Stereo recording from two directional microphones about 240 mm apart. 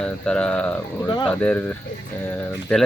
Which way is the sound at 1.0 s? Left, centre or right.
Centre.